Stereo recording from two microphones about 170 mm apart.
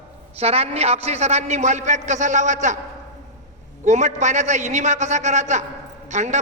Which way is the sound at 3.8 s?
45° right (ahead or behind).